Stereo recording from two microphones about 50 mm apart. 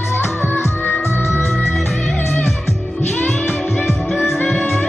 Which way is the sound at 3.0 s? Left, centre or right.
Left.